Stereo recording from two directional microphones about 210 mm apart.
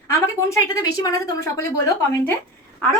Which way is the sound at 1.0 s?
15° left (ahead or behind).